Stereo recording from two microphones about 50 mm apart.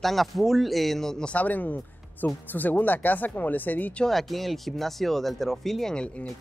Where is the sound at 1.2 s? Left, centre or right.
Left.